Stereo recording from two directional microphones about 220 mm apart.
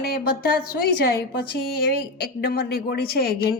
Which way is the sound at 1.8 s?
45° left (ahead or behind).